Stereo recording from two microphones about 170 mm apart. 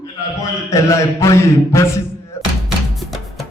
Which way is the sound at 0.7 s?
15° left (ahead or behind).